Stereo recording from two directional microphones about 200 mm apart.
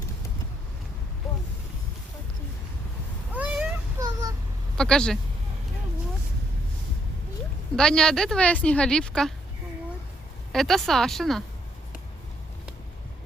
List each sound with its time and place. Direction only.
3.3 s cat: 5° right (ahead or behind)
4.0 s a sound: 20° right (ahead or behind)
4.8 s a woman's voice: 5° left (ahead or behind)
7.8 s a woman's voice: 5° left (ahead or behind)
10.5 s a woman's voice: centre (ahead or behind)